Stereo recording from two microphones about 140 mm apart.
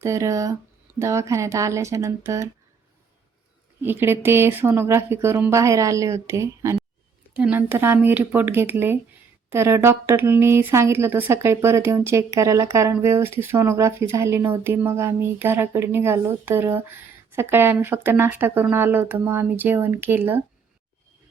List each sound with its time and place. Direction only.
0.0 s speech: 20° right (ahead or behind)
3.8 s speech: 15° right (ahead or behind)